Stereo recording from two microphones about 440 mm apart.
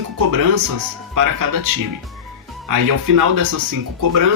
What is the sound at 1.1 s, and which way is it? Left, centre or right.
Speech, right.